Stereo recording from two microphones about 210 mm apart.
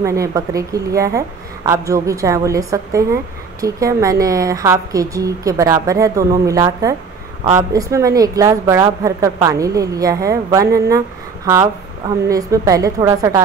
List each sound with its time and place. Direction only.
0.0 s a woman's voice: 15° right (ahead or behind)
12.3 s a woman's voice: 15° right (ahead or behind)